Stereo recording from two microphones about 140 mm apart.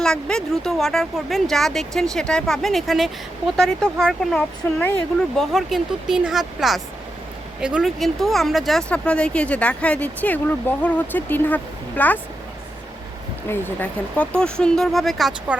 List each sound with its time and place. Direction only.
0.0 s speech: 5° left (ahead or behind)
5.4 s speech: centre (ahead or behind)
13.5 s speech: 10° left (ahead or behind)